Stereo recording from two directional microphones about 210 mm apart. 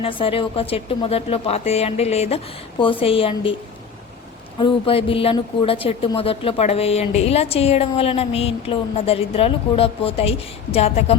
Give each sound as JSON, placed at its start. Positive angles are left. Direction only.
{"t": 0.0, "sound": "speech", "side_deg": 25}
{"t": 4.6, "sound": "speech", "side_deg": 25}